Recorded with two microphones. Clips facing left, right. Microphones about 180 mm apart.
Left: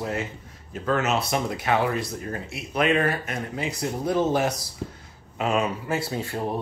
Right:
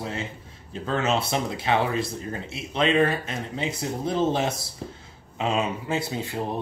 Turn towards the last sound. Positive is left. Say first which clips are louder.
# even
turn(degrees=-20)  # may be behind; listen again after turning